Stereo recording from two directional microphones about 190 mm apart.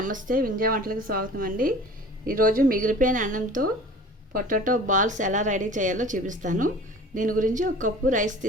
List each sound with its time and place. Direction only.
0.0 s speech: 45° right (ahead or behind)